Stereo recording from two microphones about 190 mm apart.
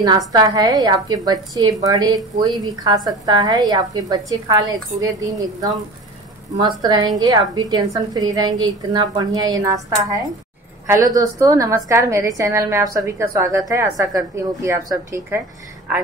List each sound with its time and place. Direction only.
0.3 s a woman's voice: 20° right (ahead or behind)
6.8 s a woman's voice: 20° right (ahead or behind)